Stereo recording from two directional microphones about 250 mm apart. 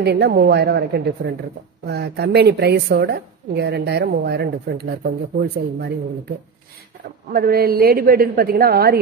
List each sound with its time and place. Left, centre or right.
0.0 s a woman's voice: right
7.3 s a woman's voice: right